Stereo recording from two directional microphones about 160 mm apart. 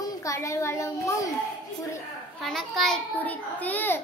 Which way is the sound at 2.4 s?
Centre (ahead or behind).